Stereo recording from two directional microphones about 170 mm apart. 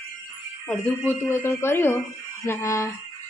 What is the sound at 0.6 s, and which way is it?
Speech, 5° left (ahead or behind).